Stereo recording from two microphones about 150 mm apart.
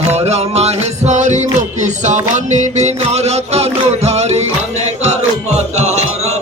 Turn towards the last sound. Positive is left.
turn(degrees=-45)  # may be behind; listen again after turning